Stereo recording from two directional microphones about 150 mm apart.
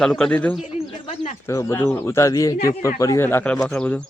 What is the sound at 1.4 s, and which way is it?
Speech, 20° left (ahead or behind).